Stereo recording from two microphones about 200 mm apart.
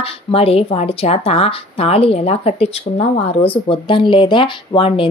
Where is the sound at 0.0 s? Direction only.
30° left (ahead or behind).